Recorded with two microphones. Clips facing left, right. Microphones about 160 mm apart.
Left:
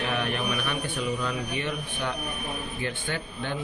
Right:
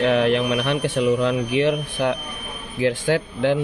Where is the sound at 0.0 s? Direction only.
85° right.